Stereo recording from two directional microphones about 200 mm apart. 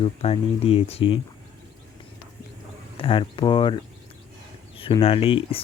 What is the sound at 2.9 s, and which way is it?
Speech, 25° left (ahead or behind).